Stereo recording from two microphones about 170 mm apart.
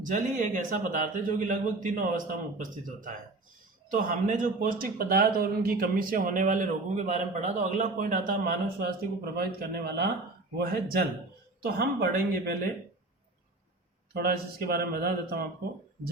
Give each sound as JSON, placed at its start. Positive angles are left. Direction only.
{"t": 0.0, "sound": "a man's voice", "side_deg": -45}
{"t": 10.6, "sound": "speech", "side_deg": -60}
{"t": 14.1, "sound": "speech", "side_deg": -65}